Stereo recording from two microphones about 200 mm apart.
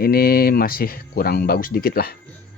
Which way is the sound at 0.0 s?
50° left (ahead or behind).